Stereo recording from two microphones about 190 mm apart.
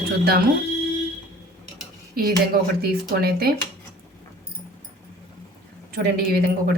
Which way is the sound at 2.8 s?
55° right (ahead or behind).